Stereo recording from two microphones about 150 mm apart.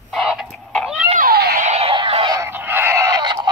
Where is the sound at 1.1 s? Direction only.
80° right.